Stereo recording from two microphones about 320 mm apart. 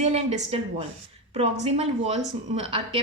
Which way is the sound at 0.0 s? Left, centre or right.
Right.